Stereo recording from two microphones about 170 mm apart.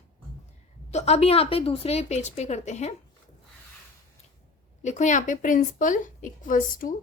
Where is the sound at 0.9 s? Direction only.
40° left (ahead or behind).